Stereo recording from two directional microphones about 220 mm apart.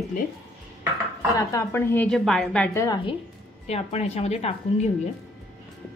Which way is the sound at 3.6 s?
30° left (ahead or behind).